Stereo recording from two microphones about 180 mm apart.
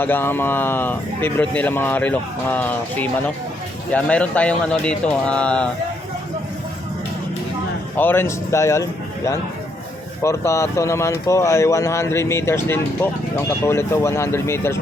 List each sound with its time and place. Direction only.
0.0 s speech: 10° left (ahead or behind)
7.9 s speech: 10° left (ahead or behind)